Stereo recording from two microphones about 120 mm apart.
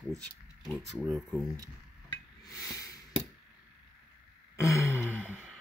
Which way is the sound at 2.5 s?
25° left (ahead or behind).